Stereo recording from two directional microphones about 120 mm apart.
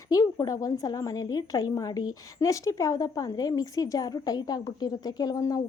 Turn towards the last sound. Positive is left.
turn(degrees=30)  # may be behind; listen again after turning